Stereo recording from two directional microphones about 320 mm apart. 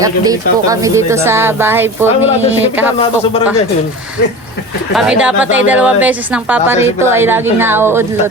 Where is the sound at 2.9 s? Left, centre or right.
Centre.